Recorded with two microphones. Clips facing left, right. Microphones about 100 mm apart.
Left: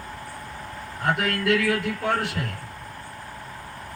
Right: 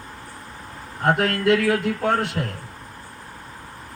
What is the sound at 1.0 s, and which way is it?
A man's voice, 30° right (ahead or behind).